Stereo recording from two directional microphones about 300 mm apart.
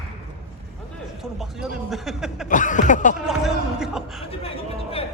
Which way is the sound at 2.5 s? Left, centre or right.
Left.